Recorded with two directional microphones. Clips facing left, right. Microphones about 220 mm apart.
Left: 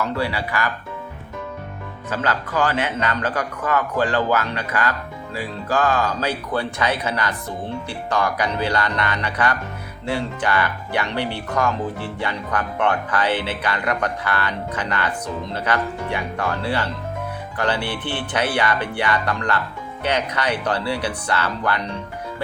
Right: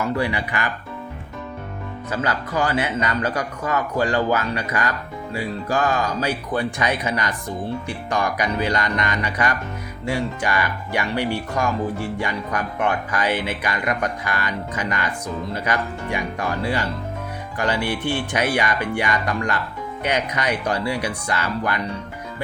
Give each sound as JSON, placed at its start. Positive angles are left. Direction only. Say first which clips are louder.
{"t": 0.2, "sound": "speech", "louder": "even", "side_deg": -15}
{"t": 2.0, "sound": "speech", "louder": "left 1 dB", "side_deg": -15}